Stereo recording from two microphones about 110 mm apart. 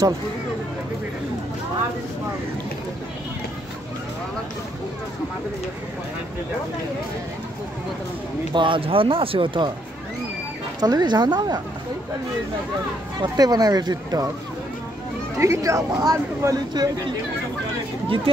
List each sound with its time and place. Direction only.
8.5 s speech: 50° right (ahead or behind)
10.8 s speech: 40° right (ahead or behind)
13.2 s speech: 35° right (ahead or behind)
15.3 s speech: 25° right (ahead or behind)
18.0 s speech: 55° right (ahead or behind)